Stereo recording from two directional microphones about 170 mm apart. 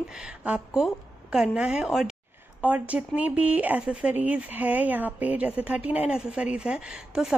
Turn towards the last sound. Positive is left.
turn(degrees=-5)  # may be behind; listen again after turning